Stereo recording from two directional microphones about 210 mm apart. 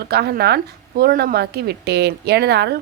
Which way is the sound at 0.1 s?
50° right (ahead or behind).